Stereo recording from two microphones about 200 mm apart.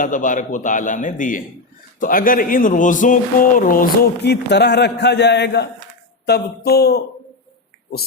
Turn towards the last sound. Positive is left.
turn(degrees=55)  # may be behind; listen again after turning